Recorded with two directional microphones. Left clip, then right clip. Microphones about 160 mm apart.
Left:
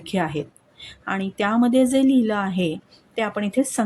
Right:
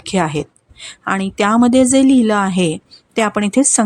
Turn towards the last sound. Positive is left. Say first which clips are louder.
# right 8 dB
turn(degrees=-35)  # may be behind; listen again after turning